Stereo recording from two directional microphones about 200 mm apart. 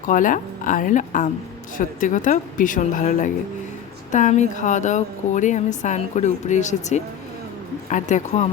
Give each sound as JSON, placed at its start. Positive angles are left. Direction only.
{"t": 0.1, "sound": "a woman's voice", "side_deg": 40}